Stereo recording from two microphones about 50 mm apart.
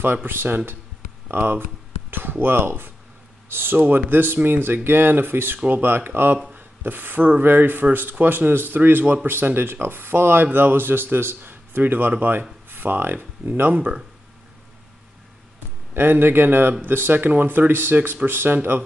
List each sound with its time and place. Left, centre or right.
0.0 s speech: right
6.5 s rub: right
7.2 s speech: right
15.9 s speech: right